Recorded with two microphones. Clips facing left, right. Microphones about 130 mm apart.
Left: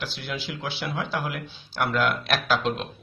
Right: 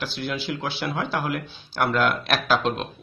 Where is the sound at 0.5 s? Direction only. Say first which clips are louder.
Right 4 dB; 50° right (ahead or behind).